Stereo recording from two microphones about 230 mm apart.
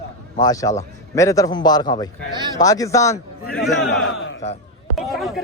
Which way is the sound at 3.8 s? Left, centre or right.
Left.